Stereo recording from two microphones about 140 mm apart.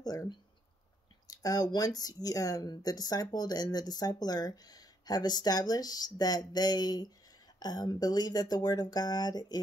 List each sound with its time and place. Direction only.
0.0 s speech: 25° left (ahead or behind)